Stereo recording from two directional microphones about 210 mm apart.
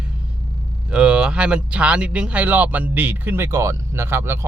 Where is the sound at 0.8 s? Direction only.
5° right (ahead or behind).